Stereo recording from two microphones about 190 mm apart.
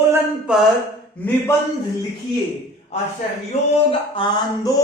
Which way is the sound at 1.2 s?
5° left (ahead or behind).